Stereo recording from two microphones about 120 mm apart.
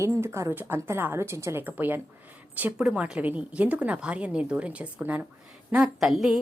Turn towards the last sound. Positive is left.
turn(degrees=-5)  # may be behind; listen again after turning